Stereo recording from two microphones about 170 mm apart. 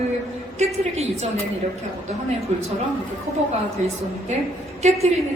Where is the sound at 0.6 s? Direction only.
40° right (ahead or behind).